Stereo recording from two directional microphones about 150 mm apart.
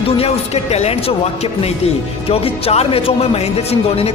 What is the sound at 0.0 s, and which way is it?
A man's voice, 40° left (ahead or behind).